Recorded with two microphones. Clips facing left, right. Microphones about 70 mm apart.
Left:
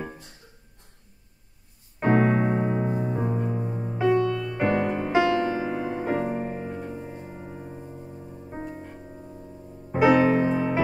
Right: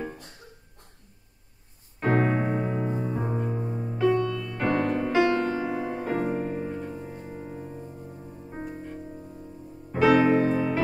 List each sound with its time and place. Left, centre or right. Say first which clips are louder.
2.0 s piano: left 3 dB; left
3.3 s music: left 1 dB; centre
3.8 s music: left 2 dB; centre
9.9 s music: left 1 dB; left
10.5 s music: left 1 dB; centre